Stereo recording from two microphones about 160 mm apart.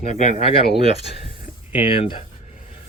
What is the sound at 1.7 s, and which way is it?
Speech, 35° left (ahead or behind).